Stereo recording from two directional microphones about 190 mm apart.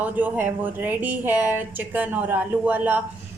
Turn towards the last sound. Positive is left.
turn(degrees=-10)  # may be behind; listen again after turning